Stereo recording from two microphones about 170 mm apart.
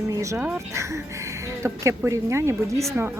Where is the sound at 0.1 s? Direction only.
20° right (ahead or behind).